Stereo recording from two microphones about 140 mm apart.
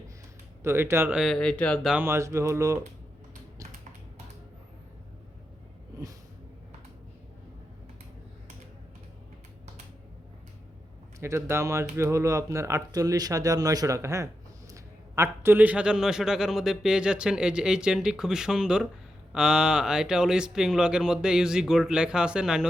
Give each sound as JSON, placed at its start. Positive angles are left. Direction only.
{"t": 0.6, "sound": "speech", "side_deg": -20}
{"t": 1.1, "sound": "a man's voice", "side_deg": 0}
{"t": 1.9, "sound": "speech", "side_deg": -15}
{"t": 11.2, "sound": "a man's voice", "side_deg": -20}